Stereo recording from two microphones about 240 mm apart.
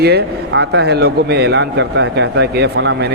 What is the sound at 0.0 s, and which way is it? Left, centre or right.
Speech, right.